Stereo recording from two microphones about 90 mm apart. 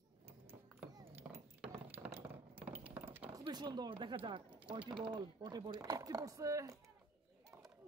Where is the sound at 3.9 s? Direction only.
75° right (ahead or behind); by 6.8 s 35° right (ahead or behind).